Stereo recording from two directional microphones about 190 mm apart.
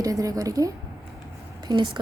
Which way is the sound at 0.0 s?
20° right (ahead or behind).